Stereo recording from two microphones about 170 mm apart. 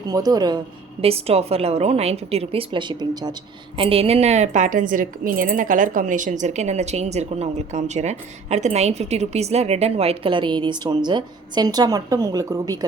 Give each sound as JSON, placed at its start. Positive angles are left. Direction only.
{"t": 0.1, "sound": "speech", "side_deg": -20}
{"t": 1.0, "sound": "a woman's voice", "side_deg": -35}